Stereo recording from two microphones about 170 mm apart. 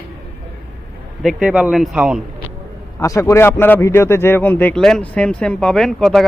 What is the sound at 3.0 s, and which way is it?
Speech, 20° left (ahead or behind).